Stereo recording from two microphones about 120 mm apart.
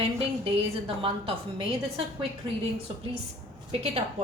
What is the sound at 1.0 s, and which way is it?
Speech, 45° right (ahead or behind).